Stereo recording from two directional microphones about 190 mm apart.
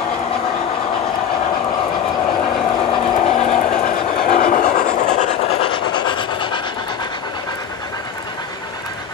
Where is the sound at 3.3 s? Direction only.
35° left (ahead or behind).